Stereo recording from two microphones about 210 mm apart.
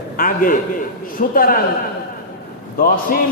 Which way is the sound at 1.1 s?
40° left (ahead or behind).